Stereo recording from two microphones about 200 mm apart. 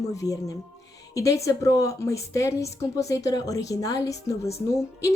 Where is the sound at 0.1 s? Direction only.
15° left (ahead or behind).